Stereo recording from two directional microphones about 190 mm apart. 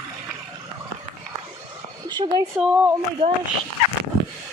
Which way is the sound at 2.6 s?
5° right (ahead or behind).